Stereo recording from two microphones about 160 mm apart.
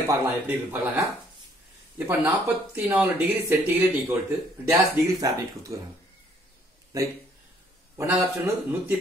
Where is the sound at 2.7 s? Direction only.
10° right (ahead or behind).